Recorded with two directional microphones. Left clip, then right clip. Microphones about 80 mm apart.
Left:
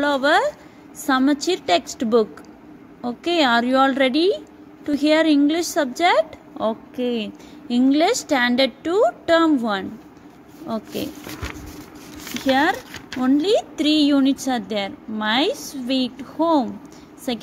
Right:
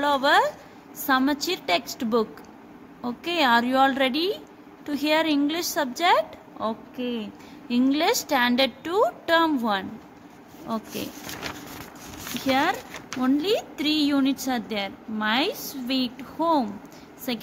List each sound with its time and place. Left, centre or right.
0.0 s a woman's voice: left
6.6 s a woman's voice: left
7.9 s a woman's voice: left
12.4 s a woman's voice: left